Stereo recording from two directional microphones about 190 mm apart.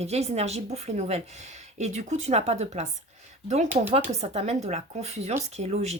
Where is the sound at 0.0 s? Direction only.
35° right (ahead or behind).